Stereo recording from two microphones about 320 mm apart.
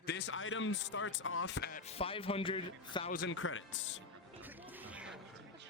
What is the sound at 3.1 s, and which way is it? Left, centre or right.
Speech, left.